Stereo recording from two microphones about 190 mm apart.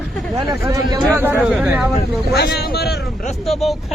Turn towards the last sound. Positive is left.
turn(degrees=0)  # may be behind; listen again after turning